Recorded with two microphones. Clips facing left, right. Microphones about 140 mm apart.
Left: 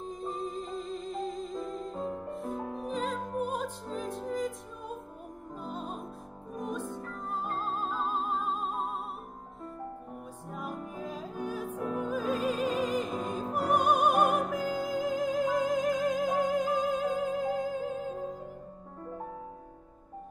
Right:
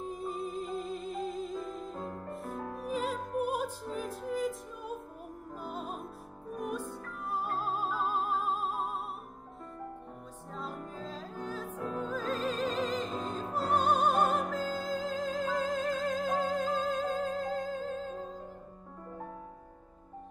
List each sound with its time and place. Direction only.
0.0 s music: 10° right (ahead or behind)
2.6 s music: 25° left (ahead or behind)
2.9 s music: 5° right (ahead or behind)
10.5 s music: 15° left (ahead or behind)